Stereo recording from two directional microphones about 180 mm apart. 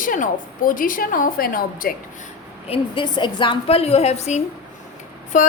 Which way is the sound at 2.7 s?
25° left (ahead or behind).